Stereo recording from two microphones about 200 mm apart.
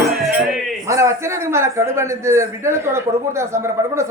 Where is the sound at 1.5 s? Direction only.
15° right (ahead or behind).